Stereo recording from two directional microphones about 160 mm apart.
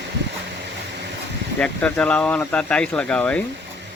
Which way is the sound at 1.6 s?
5° left (ahead or behind).